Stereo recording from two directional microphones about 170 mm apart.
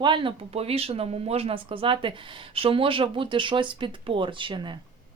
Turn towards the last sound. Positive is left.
turn(degrees=-30)  # may be behind; listen again after turning